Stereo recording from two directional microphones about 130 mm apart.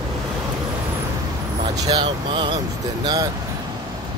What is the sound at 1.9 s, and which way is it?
Speech, 35° right (ahead or behind).